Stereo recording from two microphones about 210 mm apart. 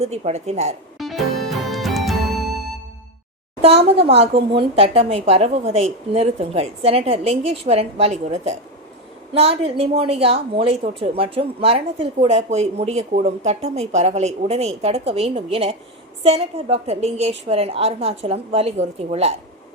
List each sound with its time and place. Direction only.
0.0 s a woman's voice: 30° right (ahead or behind)
0.9 s music: centre (ahead or behind)
3.6 s a woman's voice: 30° right (ahead or behind)